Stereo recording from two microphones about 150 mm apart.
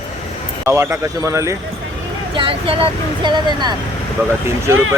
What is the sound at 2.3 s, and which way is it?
Speech, 35° right (ahead or behind).